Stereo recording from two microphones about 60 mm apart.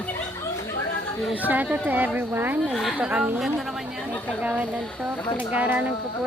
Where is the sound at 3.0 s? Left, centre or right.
Centre.